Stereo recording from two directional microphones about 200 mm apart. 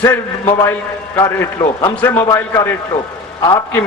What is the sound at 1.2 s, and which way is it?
A man's voice, 15° left (ahead or behind).